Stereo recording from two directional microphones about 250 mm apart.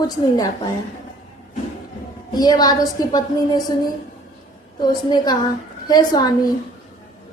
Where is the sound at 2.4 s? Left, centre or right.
Centre.